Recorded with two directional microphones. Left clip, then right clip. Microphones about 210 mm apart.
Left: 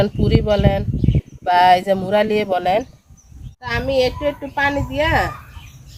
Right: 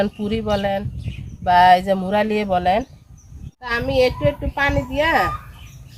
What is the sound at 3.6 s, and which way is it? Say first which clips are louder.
Speech: even; 5° right (ahead or behind).